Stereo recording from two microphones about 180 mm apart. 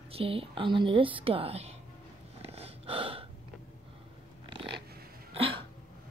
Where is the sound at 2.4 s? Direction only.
35° right (ahead or behind).